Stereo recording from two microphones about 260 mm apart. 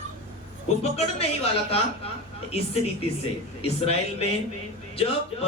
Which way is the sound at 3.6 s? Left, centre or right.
Left.